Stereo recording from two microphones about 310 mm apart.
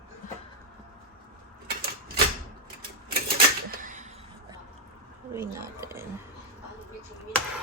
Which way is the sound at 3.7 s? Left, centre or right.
Right.